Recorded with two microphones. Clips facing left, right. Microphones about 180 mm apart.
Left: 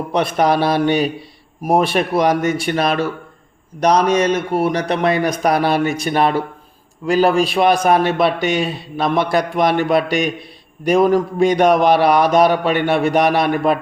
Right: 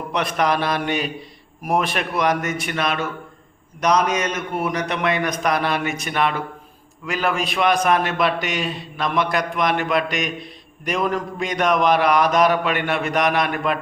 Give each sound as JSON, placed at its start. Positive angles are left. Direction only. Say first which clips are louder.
{"t": 0.2, "sound": "a man's voice", "louder": "left 5 dB", "side_deg": 30}